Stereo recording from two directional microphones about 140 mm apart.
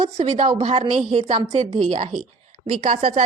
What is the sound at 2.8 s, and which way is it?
Speech, 60° right (ahead or behind).